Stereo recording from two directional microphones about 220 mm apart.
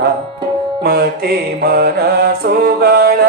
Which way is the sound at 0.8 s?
45° right (ahead or behind).